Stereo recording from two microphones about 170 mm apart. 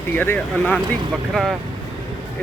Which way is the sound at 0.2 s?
10° left (ahead or behind).